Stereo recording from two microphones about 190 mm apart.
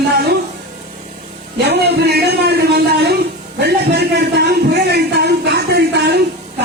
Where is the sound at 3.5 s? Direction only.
60° right (ahead or behind).